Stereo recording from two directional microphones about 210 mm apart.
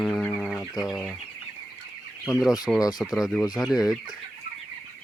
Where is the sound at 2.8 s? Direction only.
20° left (ahead or behind).